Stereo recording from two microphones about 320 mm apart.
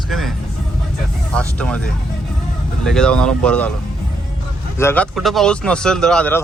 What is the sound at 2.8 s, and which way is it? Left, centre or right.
Speech, centre.